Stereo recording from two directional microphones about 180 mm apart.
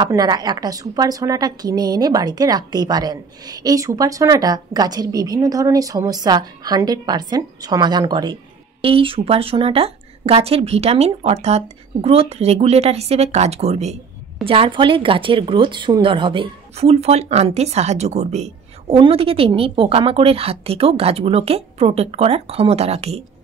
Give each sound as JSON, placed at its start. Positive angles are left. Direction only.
{"t": 0.0, "sound": "speech", "side_deg": -20}